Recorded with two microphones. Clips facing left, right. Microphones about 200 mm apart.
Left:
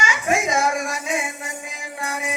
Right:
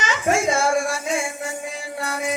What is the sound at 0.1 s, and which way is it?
Child singing, 15° left (ahead or behind).